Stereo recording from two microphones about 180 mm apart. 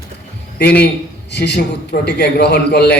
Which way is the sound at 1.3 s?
70° left (ahead or behind).